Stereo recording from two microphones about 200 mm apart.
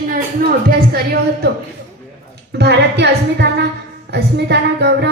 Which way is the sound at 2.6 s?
55° right (ahead or behind).